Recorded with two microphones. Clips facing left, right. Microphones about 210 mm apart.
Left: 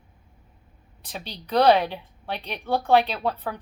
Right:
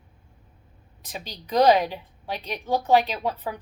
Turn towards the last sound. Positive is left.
turn(degrees=-10)  # may be behind; listen again after turning